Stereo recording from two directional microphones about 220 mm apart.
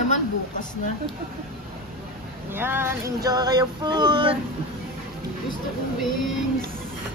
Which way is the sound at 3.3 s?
20° right (ahead or behind).